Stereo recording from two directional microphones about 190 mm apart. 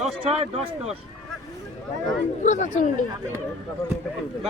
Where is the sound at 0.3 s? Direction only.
35° right (ahead or behind).